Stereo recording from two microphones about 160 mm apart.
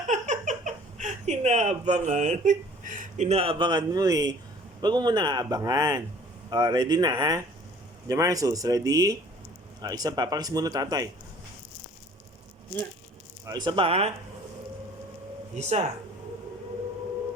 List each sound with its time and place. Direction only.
0.1 s a sound: 50° right (ahead or behind); by 4.4 s 25° right (ahead or behind)
4.8 s speech: 25° right (ahead or behind)
13.4 s speech: 25° right (ahead or behind)
15.5 s speech: 45° right (ahead or behind)